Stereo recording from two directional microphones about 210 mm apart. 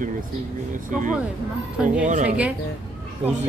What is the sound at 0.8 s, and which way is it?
Speech, 40° right (ahead or behind).